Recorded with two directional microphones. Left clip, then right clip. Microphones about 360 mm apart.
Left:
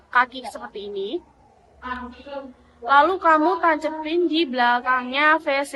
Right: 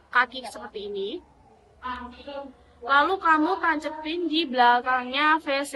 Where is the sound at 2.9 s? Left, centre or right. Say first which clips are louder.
Left 4 dB; centre.